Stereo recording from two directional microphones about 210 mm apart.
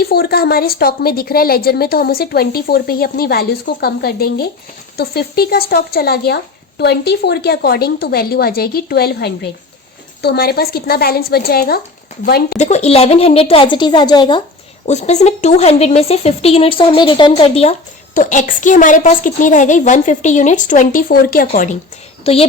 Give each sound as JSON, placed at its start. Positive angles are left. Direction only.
{"t": 0.0, "sound": "a woman's voice", "side_deg": 45}
{"t": 14.8, "sound": "speech", "side_deg": 35}
{"t": 22.2, "sound": "speech", "side_deg": 30}